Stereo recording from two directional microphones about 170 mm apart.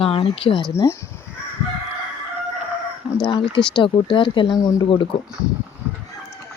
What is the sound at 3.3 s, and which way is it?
Speech, 30° left (ahead or behind).